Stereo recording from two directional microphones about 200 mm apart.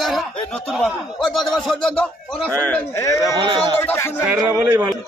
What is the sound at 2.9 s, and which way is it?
Speech, 15° left (ahead or behind).